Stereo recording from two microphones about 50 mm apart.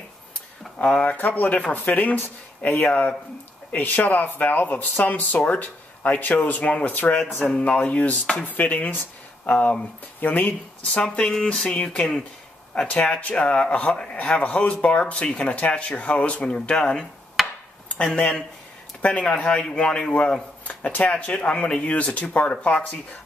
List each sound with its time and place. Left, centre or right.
0.7 s a sound: centre
1.0 s speech: left
7.4 s a man's voice: left
11.0 s a man's voice: centre
17.4 s chop: centre
18.0 s a man's voice: left
19.2 s a man's voice: centre
20.6 s a sound: left
21.1 s a man's voice: left